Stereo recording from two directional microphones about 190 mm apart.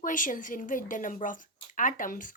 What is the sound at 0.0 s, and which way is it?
Speech, 45° left (ahead or behind).